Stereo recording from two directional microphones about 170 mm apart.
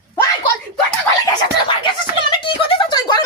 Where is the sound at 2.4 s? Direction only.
30° left (ahead or behind).